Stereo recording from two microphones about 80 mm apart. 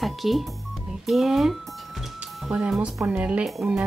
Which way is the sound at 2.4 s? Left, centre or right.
Centre.